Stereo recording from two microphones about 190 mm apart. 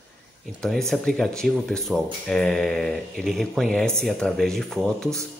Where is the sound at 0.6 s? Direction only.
5° left (ahead or behind).